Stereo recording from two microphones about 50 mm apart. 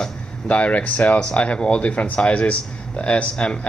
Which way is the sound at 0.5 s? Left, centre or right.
Left.